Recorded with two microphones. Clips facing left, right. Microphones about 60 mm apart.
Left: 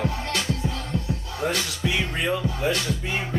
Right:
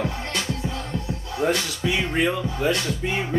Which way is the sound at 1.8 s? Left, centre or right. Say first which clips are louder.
Right 4 dB; right.